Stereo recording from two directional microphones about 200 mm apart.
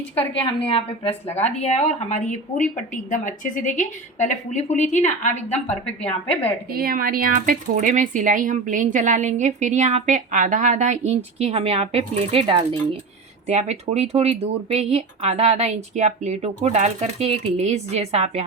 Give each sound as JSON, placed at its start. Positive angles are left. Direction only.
{"t": 0.6, "sound": "a woman's voice", "side_deg": 25}
{"t": 5.8, "sound": "a woman's voice", "side_deg": 5}
{"t": 6.7, "sound": "speech", "side_deg": -50}